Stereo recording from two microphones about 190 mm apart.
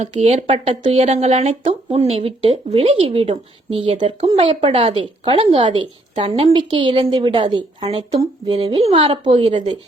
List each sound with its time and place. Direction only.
0.0 s speech: 35° right (ahead or behind)